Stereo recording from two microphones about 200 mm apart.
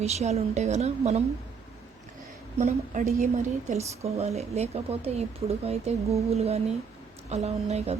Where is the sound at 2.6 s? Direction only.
40° right (ahead or behind).